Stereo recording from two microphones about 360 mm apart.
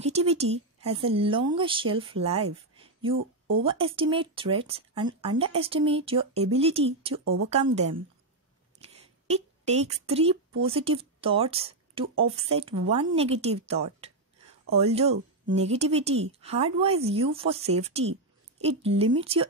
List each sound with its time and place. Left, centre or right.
0.0 s a woman's voice: centre
8.8 s a sound: centre
10.6 s speech: centre